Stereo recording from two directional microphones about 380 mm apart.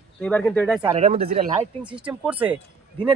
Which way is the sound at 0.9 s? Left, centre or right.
Centre.